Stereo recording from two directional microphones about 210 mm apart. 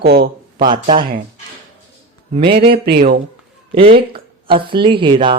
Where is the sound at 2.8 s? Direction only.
45° right (ahead or behind).